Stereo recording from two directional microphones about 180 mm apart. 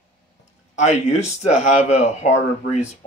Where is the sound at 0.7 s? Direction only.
40° left (ahead or behind).